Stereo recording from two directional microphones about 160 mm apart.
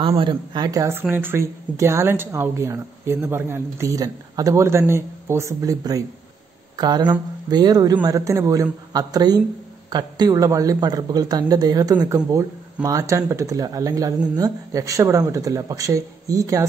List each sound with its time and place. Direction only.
0.2 s speech: 30° right (ahead or behind)